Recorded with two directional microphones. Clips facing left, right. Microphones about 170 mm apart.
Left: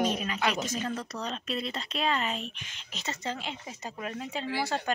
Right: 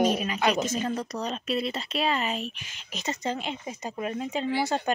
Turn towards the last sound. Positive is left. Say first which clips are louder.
# right 5 dB
turn(degrees=-20)  # may be behind; listen again after turning